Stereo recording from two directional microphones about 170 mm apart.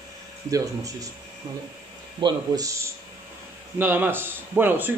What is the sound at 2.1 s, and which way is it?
A man's voice, 25° right (ahead or behind).